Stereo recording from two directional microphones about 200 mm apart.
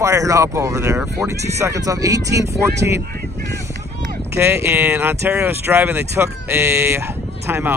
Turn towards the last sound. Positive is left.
turn(degrees=-10)  # may be behind; listen again after turning